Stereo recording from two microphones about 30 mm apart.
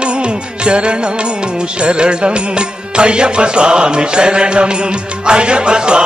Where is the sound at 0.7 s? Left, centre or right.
Right.